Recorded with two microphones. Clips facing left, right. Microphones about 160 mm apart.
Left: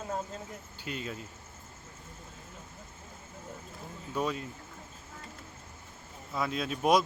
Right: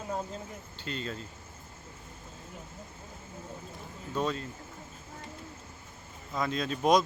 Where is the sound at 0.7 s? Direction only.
10° left (ahead or behind).